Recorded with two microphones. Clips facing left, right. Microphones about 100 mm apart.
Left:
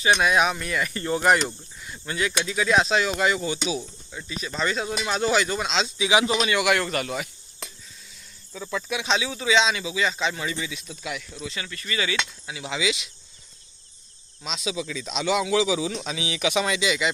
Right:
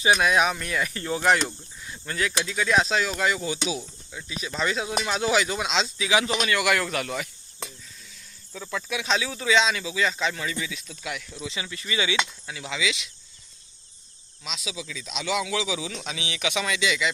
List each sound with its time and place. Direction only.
0.1 s speech: centre (ahead or behind)
6.0 s speech: 20° left (ahead or behind)
6.6 s speech: 5° left (ahead or behind)
8.5 s speech: 10° left (ahead or behind)
11.4 s speech: 15° right (ahead or behind)
12.5 s speech: 10° left (ahead or behind)
12.7 s speech: 25° left (ahead or behind)
14.4 s speech: 35° left (ahead or behind)
15.1 s speech: 30° left (ahead or behind)